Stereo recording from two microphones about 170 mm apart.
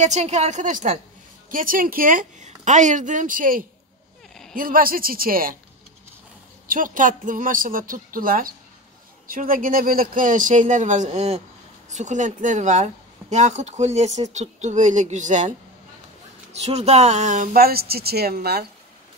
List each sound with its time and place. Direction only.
0.0 s speech: 40° right (ahead or behind)
6.7 s speech: 50° right (ahead or behind)
16.6 s speech: 40° right (ahead or behind); by 18.7 s 70° right (ahead or behind)